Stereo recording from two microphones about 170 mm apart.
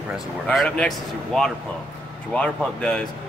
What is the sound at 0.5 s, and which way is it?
Speech, 5° left (ahead or behind).